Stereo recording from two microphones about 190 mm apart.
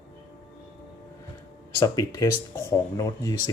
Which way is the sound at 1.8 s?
20° left (ahead or behind).